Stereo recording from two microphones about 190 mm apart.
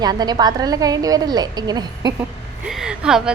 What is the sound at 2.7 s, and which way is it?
Speech, 5° right (ahead or behind).